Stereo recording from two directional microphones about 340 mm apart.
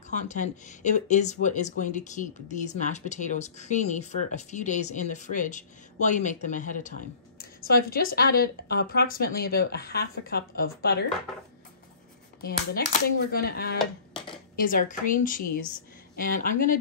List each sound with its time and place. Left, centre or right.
0.1 s speech: left
12.4 s speech: left
15.4 s speech: left
16.2 s speech: left